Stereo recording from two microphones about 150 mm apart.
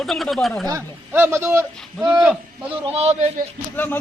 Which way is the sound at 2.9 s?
45° right (ahead or behind).